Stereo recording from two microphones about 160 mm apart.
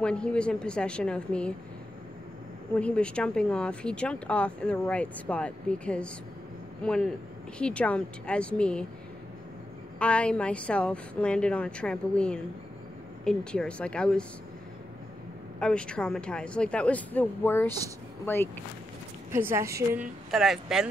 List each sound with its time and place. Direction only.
0.0 s speech: 5° left (ahead or behind)
2.7 s speech: 5° left (ahead or behind)
9.9 s speech: 5° left (ahead or behind)
15.6 s speech: 5° left (ahead or behind)
19.3 s a woman's voice: 15° right (ahead or behind)
20.0 s speech: 5° right (ahead or behind)